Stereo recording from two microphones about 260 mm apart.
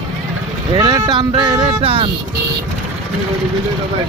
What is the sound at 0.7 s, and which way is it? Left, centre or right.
Speech, centre.